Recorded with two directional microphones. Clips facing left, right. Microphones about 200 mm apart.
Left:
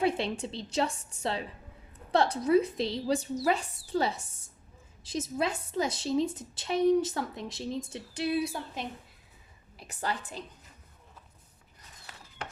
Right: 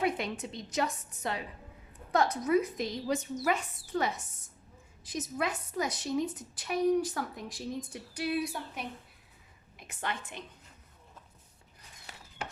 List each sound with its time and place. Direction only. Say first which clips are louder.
0.0 s a woman's voice: left 3 dB; 30° left (ahead or behind)
9.7 s a woman's voice: left 3 dB; 35° left (ahead or behind)